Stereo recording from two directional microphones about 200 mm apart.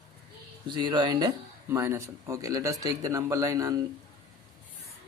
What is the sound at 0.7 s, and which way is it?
Speech, 20° right (ahead or behind).